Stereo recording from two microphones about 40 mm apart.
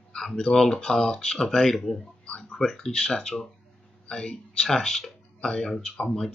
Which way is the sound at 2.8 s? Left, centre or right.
Left.